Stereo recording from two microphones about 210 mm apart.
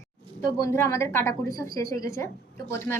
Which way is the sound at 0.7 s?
10° left (ahead or behind).